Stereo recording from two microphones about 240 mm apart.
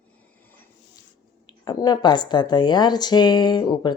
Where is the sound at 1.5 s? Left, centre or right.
Centre.